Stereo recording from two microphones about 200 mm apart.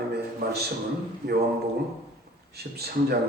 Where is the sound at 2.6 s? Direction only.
50° right (ahead or behind).